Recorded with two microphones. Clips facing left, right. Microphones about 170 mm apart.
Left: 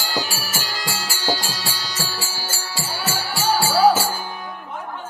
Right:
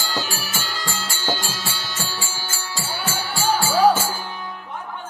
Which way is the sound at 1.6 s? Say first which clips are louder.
Left 1 dB; 40° left (ahead or behind).